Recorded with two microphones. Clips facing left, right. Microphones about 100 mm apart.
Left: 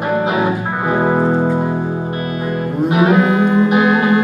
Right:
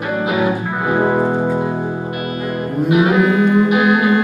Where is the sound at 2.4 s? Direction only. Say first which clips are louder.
Left 1 dB; 30° left (ahead or behind).